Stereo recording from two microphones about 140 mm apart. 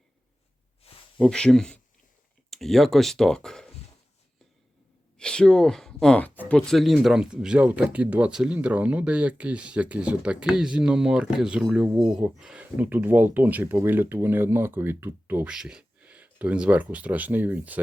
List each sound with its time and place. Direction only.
0.9 s a sound: 45° left (ahead or behind)
1.2 s speech: 5° left (ahead or behind)
5.1 s speech: 5° left (ahead or behind); by 17.7 s 10° right (ahead or behind)